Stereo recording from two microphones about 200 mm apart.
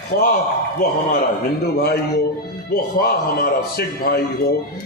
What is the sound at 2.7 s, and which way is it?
A man's voice, 50° left (ahead or behind).